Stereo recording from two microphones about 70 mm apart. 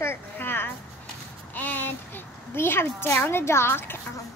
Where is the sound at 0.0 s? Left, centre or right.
Left.